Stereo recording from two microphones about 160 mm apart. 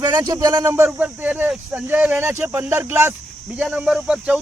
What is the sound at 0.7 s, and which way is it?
Speech, 10° right (ahead or behind).